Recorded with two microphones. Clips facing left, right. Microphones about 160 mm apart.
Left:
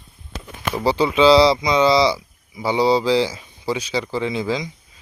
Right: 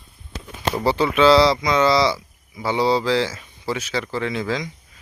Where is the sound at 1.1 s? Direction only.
30° left (ahead or behind).